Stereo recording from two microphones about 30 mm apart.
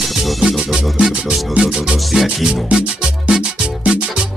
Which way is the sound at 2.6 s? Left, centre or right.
Right.